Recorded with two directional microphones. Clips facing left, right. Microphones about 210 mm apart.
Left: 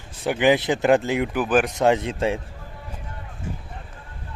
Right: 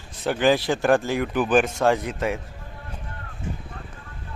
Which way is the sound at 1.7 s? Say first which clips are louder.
Left 2 dB; 20° left (ahead or behind).